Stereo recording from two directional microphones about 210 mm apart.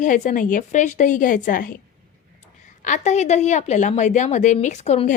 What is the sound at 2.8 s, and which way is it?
A woman's voice, 35° left (ahead or behind).